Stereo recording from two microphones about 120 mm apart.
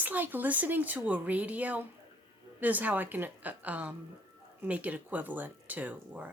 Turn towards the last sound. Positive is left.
turn(degrees=-10)  # may be behind; listen again after turning